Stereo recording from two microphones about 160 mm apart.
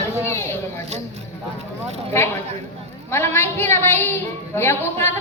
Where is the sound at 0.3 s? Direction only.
15° left (ahead or behind).